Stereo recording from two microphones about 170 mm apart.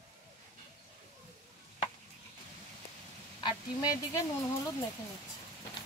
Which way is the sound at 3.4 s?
20° left (ahead or behind).